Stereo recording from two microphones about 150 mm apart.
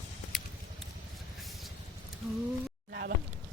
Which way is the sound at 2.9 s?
90° right.